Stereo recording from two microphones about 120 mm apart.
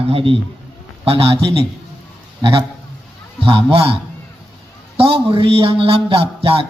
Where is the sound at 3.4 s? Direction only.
50° right (ahead or behind).